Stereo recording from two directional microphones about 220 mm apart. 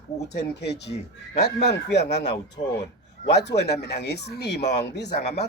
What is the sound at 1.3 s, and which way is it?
Speech, 50° left (ahead or behind).